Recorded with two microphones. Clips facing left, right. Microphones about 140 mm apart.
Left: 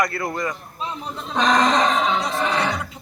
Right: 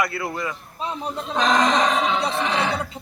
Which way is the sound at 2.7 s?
25° right (ahead or behind).